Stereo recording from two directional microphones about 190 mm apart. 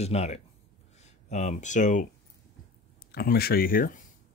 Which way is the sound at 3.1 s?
55° left (ahead or behind).